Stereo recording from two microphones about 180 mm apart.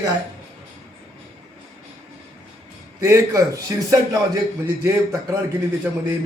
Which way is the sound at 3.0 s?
15° right (ahead or behind).